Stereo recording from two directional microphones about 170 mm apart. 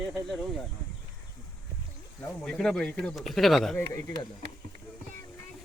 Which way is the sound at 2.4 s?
Centre (ahead or behind).